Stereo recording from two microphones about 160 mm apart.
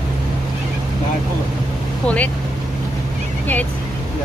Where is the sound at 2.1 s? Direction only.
10° left (ahead or behind).